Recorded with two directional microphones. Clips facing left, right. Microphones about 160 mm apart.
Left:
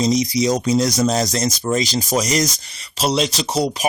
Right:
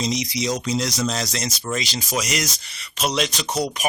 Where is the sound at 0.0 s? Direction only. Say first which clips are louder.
Left 7 dB; 40° left (ahead or behind).